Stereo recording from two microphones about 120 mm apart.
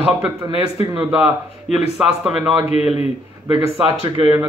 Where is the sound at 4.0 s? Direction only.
50° right (ahead or behind).